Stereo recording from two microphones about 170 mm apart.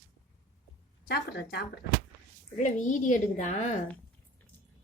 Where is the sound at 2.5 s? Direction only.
50° left (ahead or behind).